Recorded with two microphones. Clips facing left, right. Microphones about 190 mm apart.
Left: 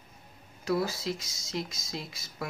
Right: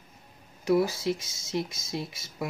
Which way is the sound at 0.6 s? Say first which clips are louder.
Right 5 dB; 20° right (ahead or behind).